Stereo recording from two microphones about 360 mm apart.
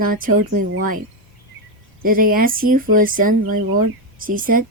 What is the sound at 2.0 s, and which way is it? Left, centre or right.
Speech, right.